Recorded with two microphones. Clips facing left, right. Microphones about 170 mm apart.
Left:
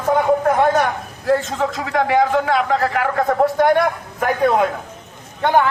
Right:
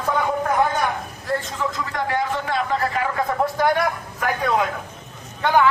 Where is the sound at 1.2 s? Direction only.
85° left.